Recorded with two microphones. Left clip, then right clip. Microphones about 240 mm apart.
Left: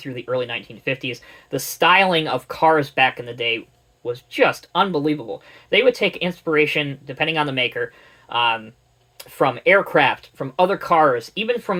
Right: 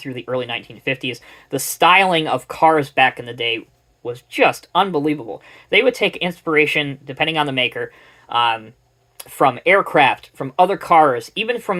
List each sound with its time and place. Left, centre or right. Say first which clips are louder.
0.0 s speech: even; right